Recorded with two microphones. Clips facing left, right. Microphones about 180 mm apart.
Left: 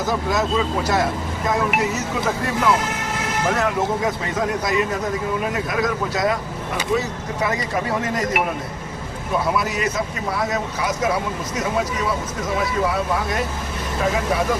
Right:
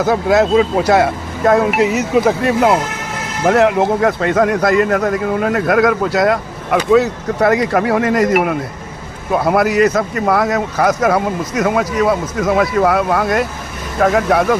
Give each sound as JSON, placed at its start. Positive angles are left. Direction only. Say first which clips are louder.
{"t": 0.0, "sound": "speech", "louder": "right 9 dB", "side_deg": -65}
{"t": 3.4, "sound": "a man's voice", "louder": "right 10 dB", "side_deg": -70}
{"t": 9.3, "sound": "a man's voice", "louder": "right 8 dB", "side_deg": -65}